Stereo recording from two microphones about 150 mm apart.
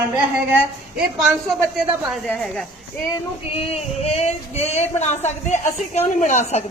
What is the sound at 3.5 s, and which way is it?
Female singing, 45° left (ahead or behind).